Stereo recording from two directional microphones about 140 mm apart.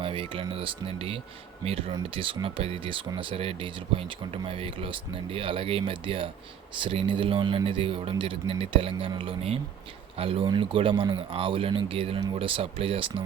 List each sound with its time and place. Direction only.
0.0 s speech: 40° right (ahead or behind)